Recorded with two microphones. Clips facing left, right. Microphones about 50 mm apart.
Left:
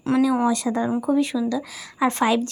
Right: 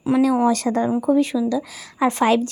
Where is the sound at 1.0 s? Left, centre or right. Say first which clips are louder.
Right 3 dB; right.